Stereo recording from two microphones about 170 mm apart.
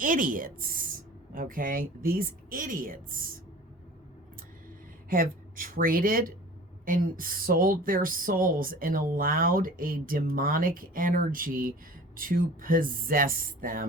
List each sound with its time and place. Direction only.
0.0 s a woman's voice: 55° right (ahead or behind)
5.0 s a woman's voice: 55° right (ahead or behind)